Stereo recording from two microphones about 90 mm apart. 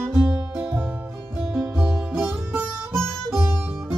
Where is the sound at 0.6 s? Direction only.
20° right (ahead or behind).